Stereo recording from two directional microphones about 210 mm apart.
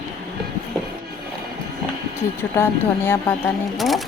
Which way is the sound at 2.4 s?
10° left (ahead or behind).